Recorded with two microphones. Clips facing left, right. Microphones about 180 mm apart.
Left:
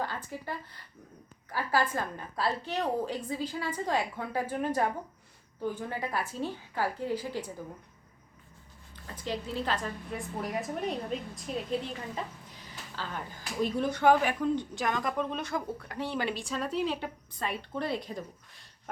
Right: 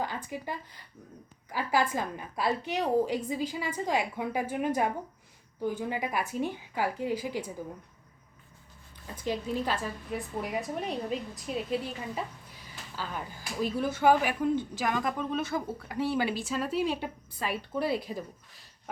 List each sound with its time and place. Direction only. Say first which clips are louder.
0.0 s a woman's voice: right 1 dB; 15° right (ahead or behind)
9.0 s speech: right 3 dB; 15° right (ahead or behind)
13.0 s speech: right 1 dB; 5° right (ahead or behind)